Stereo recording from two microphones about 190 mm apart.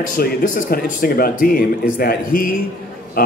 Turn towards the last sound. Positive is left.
turn(degrees=50)  # may be behind; listen again after turning